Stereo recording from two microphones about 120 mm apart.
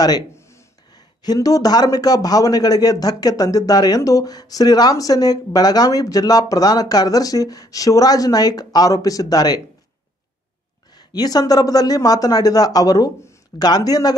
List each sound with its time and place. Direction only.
0.3 s a sound: 25° left (ahead or behind)
0.9 s a man's voice: 35° left (ahead or behind)
11.0 s a man's voice: 35° left (ahead or behind)